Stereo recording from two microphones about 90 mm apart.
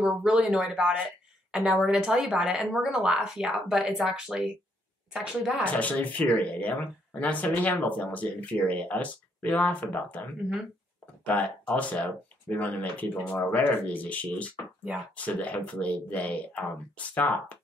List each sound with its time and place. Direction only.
0.0 s a woman's voice: 10° right (ahead or behind)
5.7 s speech: 15° left (ahead or behind)